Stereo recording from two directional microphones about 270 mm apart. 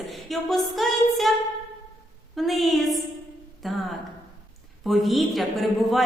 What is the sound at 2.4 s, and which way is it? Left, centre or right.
A man's voice, centre.